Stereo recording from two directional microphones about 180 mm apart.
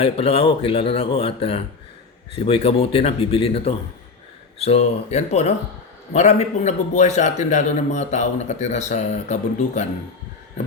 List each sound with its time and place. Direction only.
0.0 s a man's voice: 30° left (ahead or behind)